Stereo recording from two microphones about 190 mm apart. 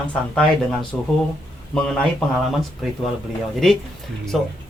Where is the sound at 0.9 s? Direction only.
10° left (ahead or behind).